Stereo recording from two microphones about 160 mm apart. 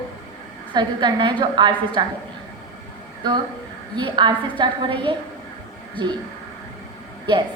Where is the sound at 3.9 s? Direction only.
30° right (ahead or behind).